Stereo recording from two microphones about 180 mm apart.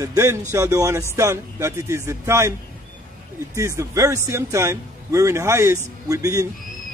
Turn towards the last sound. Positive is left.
turn(degrees=-20)  # may be behind; listen again after turning